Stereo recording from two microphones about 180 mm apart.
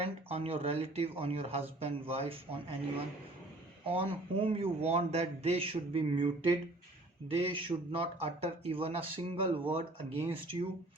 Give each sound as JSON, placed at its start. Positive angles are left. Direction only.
{"t": 0.0, "sound": "speech", "side_deg": -35}
{"t": 3.8, "sound": "speech", "side_deg": -30}
{"t": 7.3, "sound": "speech", "side_deg": -30}